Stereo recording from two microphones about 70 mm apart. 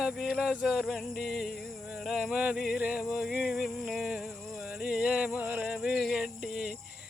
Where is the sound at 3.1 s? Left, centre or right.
Centre.